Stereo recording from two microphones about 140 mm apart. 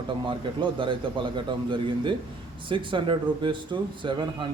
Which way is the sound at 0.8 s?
35° right (ahead or behind).